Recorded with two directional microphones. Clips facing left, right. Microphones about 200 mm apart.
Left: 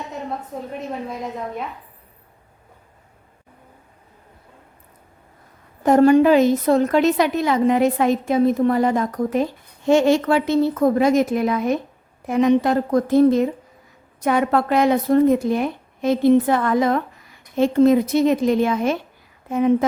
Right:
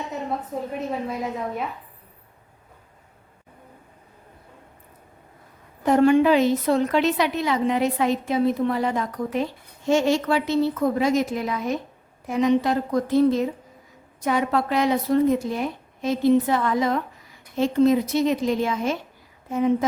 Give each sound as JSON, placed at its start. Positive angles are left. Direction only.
{"t": 0.7, "sound": "a woman's voice", "side_deg": 0}
{"t": 5.8, "sound": "a woman's voice", "side_deg": 45}